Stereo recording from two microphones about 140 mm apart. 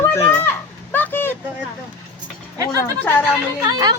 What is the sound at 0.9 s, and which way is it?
Vehicle, 15° left (ahead or behind).